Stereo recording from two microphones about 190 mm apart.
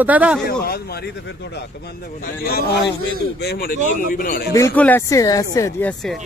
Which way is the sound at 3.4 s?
60° left (ahead or behind).